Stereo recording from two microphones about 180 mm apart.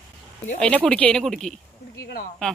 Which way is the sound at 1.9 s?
60° left (ahead or behind).